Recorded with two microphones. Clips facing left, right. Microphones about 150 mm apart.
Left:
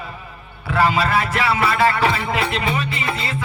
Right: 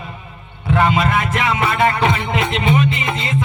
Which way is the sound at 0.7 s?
30° left (ahead or behind).